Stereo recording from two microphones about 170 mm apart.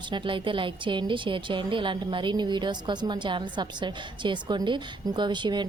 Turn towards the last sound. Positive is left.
turn(degrees=-25)  # may be behind; listen again after turning